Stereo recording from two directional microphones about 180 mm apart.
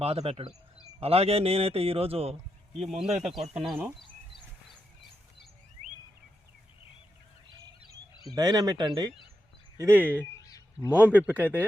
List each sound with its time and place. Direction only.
0.0 s a man's voice: 35° right (ahead or behind)
2.7 s speech: centre (ahead or behind)
8.2 s speech: 20° right (ahead or behind)
10.4 s a sound: 20° left (ahead or behind)
10.9 s speech: 10° right (ahead or behind)